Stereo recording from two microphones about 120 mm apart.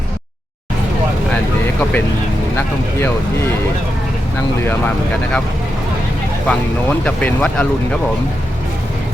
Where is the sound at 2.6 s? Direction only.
20° left (ahead or behind).